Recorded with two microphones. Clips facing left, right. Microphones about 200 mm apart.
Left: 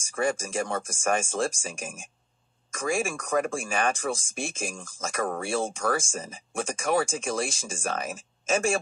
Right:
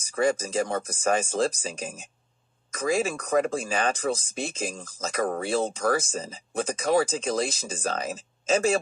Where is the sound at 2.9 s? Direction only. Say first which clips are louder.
Right 3 dB; 20° right (ahead or behind).